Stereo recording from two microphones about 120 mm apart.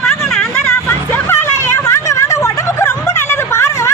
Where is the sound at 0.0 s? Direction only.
5° left (ahead or behind).